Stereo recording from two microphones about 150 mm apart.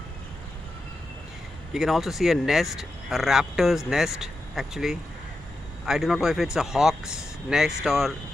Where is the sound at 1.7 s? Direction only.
Centre (ahead or behind).